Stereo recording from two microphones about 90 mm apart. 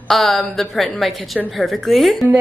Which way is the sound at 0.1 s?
Centre (ahead or behind).